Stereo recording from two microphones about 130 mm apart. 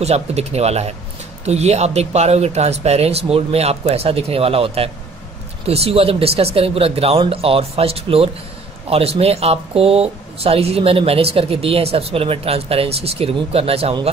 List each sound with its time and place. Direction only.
0.0 s speech: 55° right (ahead or behind)